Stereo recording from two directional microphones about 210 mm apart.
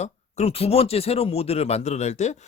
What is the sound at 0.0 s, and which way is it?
Speech, 30° left (ahead or behind).